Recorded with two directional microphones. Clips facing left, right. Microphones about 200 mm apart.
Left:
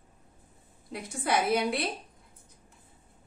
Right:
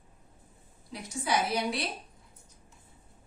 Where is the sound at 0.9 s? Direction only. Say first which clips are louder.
Left 1 dB; 55° left (ahead or behind).